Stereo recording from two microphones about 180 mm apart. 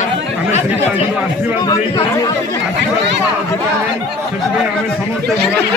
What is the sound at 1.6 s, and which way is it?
Speech, 20° left (ahead or behind).